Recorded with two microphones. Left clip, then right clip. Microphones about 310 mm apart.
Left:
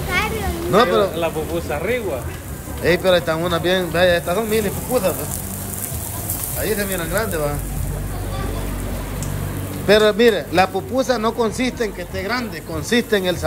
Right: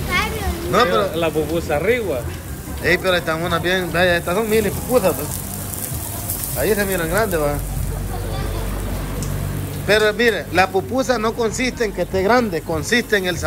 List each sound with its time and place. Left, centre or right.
0.1 s a sound: left
0.7 s speech: centre
1.1 s speech: right
2.8 s speech: centre
6.6 s speech: centre
9.8 s speech: centre
12.0 s speech: centre